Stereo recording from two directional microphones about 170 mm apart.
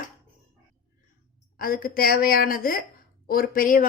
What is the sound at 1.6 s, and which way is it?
A woman's voice, 60° left (ahead or behind).